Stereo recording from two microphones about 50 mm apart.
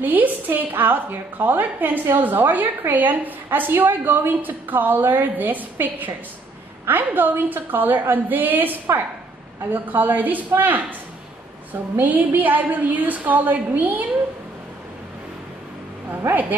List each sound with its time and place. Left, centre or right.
0.0 s a woman's voice: right
12.0 s a woman's voice: right
16.1 s speech: right